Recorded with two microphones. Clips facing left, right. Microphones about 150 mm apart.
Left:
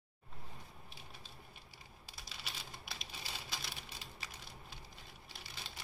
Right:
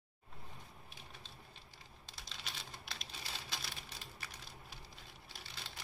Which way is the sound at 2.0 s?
5° left (ahead or behind).